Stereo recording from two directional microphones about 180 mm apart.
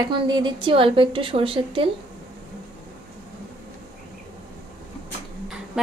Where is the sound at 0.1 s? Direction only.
25° right (ahead or behind).